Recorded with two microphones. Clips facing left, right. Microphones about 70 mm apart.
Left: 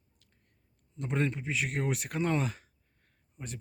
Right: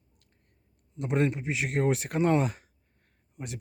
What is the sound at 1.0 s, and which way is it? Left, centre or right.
Speech, centre.